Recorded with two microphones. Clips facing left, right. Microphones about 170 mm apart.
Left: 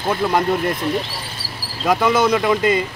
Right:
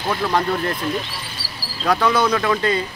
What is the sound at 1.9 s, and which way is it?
Speech, 10° left (ahead or behind).